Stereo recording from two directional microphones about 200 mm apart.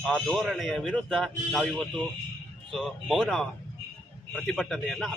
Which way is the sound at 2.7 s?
Centre (ahead or behind).